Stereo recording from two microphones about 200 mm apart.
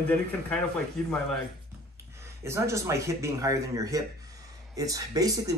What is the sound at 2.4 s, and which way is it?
Speech, 15° right (ahead or behind).